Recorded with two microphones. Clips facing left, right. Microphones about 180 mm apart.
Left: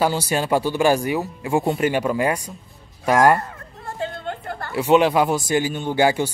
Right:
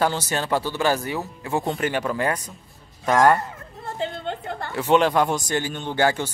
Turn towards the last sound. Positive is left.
turn(degrees=10)  # may be behind; listen again after turning